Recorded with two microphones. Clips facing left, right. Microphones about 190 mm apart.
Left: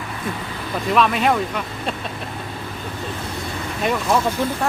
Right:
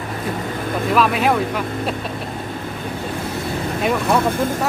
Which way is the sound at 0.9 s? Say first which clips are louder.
Even; centre (ahead or behind).